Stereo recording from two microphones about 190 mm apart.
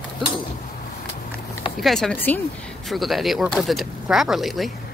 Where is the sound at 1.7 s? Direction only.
Centre (ahead or behind).